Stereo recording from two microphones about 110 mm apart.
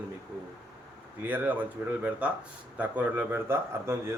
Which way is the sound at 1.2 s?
15° right (ahead or behind).